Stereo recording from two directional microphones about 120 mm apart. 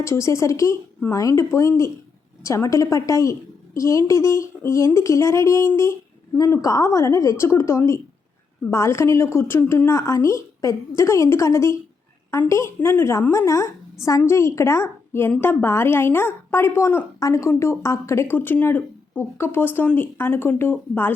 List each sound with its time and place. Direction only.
0.0 s speech: 25° left (ahead or behind)